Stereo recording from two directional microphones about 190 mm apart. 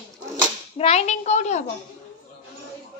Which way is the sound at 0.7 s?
35° left (ahead or behind).